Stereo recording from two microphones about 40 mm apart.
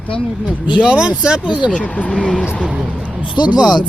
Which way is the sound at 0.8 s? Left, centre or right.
Right.